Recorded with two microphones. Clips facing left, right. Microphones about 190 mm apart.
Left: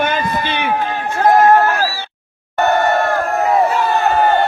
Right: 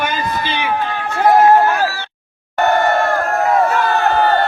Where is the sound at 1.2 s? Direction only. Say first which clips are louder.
Even; 10° right (ahead or behind).